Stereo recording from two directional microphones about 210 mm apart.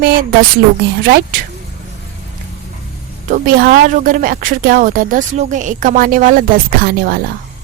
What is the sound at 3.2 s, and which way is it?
Speech, 40° right (ahead or behind).